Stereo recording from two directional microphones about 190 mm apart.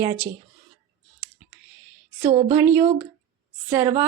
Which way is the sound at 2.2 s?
40° right (ahead or behind).